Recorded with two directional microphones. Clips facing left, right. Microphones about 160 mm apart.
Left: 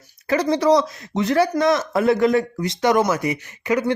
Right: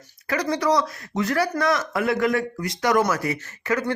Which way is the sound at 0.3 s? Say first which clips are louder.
Left 5 dB; 25° left (ahead or behind).